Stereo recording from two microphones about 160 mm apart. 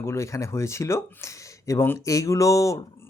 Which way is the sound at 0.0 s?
15° left (ahead or behind).